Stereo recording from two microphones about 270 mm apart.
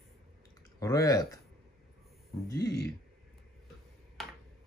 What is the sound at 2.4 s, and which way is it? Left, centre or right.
Speech, centre.